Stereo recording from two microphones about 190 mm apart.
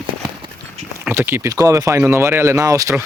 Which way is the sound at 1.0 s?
10° right (ahead or behind).